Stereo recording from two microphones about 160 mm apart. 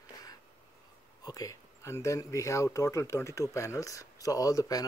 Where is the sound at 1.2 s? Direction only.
20° left (ahead or behind).